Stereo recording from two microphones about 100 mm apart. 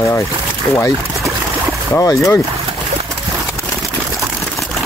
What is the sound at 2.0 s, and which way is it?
Speech, 30° left (ahead or behind).